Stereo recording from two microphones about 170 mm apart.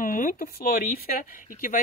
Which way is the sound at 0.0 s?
55° left (ahead or behind).